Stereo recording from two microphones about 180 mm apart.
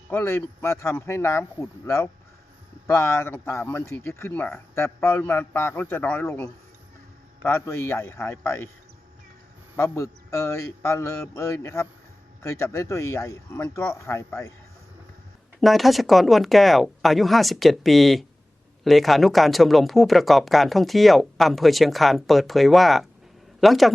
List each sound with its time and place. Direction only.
0.1 s speech: 10° left (ahead or behind)
9.7 s speech: 15° left (ahead or behind)
15.6 s speech: centre (ahead or behind)